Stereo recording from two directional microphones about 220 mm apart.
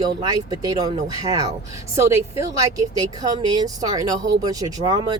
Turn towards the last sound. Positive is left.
turn(degrees=-20)  # may be behind; listen again after turning